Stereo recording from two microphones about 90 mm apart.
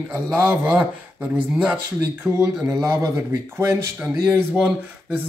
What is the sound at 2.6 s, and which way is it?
Speech, 35° right (ahead or behind).